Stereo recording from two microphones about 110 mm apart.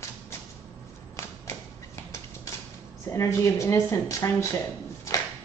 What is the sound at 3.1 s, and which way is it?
A woman's voice, 25° left (ahead or behind).